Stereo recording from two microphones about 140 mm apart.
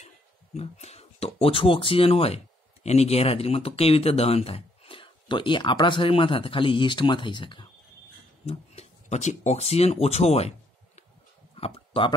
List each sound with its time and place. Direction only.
0.6 s speech: 50° left (ahead or behind); by 7.7 s 35° left (ahead or behind)
8.5 s speech: 50° left (ahead or behind)
11.5 s a sound: 45° left (ahead or behind)